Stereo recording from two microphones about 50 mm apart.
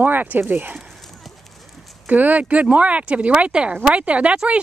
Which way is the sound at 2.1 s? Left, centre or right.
Right.